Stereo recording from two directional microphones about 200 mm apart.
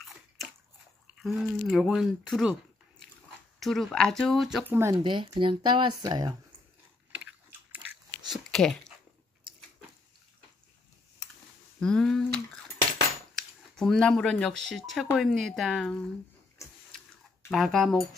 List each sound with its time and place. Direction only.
1.2 s speech: centre (ahead or behind)
3.5 s speech: centre (ahead or behind)
5.0 s speech: 25° right (ahead or behind)
7.7 s biting: 15° right (ahead or behind)
8.3 s a sound: centre (ahead or behind)
11.8 s a sound: 5° left (ahead or behind)
13.4 s speech: 5° left (ahead or behind)
17.5 s speech: centre (ahead or behind)